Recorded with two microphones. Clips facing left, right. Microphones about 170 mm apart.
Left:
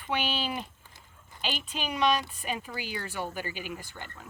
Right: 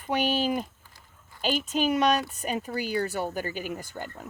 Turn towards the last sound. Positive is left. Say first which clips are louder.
# right 7 dB
turn(degrees=-45)  # may be behind; listen again after turning